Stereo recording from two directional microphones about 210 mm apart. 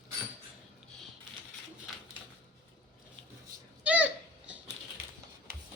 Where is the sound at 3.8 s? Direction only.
5° right (ahead or behind).